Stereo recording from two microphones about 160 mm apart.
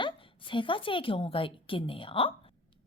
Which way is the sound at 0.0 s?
30° left (ahead or behind).